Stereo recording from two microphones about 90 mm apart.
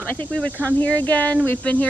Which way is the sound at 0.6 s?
15° left (ahead or behind).